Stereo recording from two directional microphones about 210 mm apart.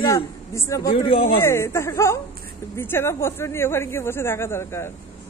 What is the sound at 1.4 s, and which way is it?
Speech, 10° left (ahead or behind).